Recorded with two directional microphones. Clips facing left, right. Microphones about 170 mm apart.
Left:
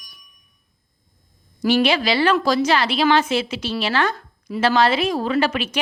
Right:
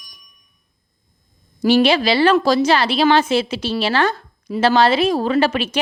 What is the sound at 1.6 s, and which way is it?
A woman's voice, 30° right (ahead or behind).